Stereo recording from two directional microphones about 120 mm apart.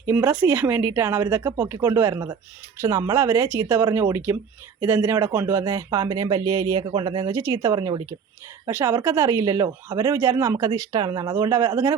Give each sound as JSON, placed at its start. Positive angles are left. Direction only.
{"t": 0.0, "sound": "speech", "side_deg": -15}
{"t": 8.7, "sound": "speech", "side_deg": -20}